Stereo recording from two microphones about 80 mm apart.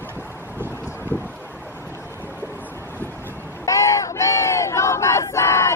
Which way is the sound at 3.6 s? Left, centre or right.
Left.